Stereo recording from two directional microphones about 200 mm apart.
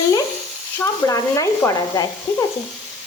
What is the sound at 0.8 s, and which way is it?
Speech, 15° left (ahead or behind).